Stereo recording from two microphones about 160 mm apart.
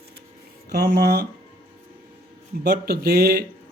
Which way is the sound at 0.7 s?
90° right.